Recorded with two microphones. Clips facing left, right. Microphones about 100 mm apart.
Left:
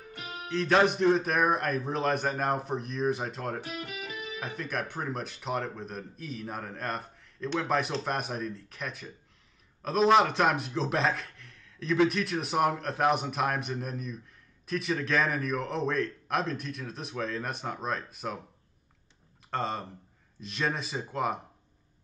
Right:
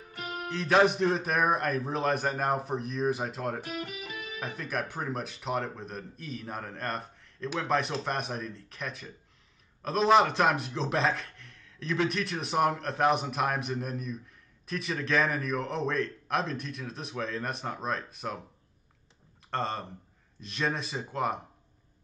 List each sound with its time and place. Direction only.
0.1 s music: 45° right (ahead or behind)
0.5 s speech: centre (ahead or behind)
3.6 s speech: 45° right (ahead or behind)
4.4 s speech: centre (ahead or behind)
19.5 s speech: centre (ahead or behind)